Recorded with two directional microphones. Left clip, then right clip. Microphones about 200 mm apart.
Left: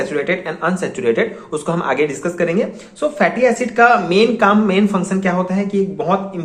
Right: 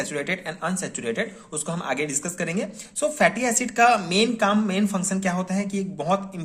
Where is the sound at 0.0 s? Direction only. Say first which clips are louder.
Left 9 dB; 40° right (ahead or behind).